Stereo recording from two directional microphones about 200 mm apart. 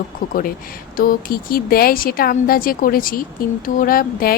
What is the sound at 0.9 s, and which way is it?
Speech, 45° left (ahead or behind).